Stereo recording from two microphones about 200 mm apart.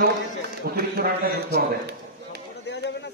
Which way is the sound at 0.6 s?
50° right (ahead or behind).